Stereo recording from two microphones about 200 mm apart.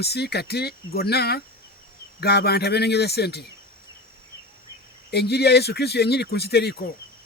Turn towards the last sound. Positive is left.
turn(degrees=55)  # may be behind; listen again after turning